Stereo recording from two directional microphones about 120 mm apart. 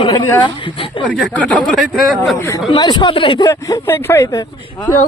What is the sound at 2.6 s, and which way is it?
Speech, 40° left (ahead or behind).